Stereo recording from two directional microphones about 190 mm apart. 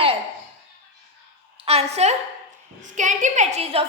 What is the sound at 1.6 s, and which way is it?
A woman's voice, 35° right (ahead or behind).